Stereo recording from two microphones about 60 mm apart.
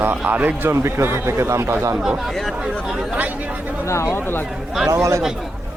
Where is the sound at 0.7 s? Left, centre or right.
Right.